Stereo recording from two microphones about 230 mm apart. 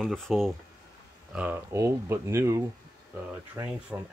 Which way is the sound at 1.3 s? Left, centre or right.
Centre.